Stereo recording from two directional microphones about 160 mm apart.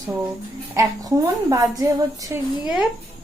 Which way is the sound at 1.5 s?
20° right (ahead or behind).